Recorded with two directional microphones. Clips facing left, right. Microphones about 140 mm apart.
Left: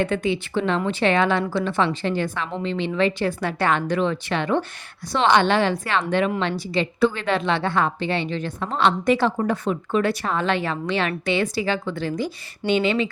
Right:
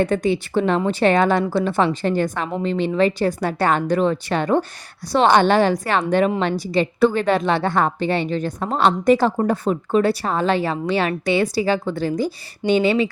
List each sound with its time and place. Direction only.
0.0 s a woman's voice: 40° right (ahead or behind)